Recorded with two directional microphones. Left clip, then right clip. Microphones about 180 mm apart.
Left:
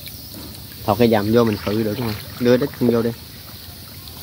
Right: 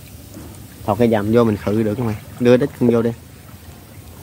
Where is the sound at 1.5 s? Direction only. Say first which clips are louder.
Right 2 dB; 30° right (ahead or behind).